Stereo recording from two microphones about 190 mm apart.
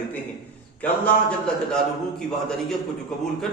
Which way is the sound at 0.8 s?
5° left (ahead or behind).